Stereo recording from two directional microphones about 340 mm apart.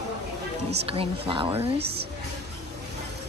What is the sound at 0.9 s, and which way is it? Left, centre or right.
A woman's voice, centre.